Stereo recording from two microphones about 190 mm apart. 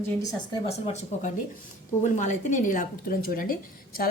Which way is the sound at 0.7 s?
35° left (ahead or behind).